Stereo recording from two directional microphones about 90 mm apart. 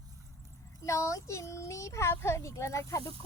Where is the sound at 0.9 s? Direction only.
35° left (ahead or behind).